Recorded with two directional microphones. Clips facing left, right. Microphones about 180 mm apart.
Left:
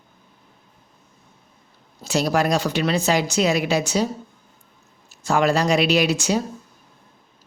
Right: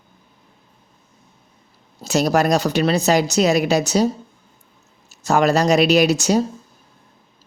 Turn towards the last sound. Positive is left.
turn(degrees=-40)  # may be behind; listen again after turning